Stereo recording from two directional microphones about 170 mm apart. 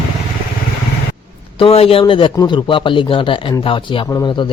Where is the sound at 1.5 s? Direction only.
35° left (ahead or behind).